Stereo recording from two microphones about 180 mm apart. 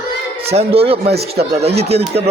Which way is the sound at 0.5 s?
35° right (ahead or behind).